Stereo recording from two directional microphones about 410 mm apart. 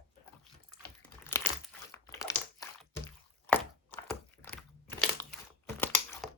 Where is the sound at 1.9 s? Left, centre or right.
Centre.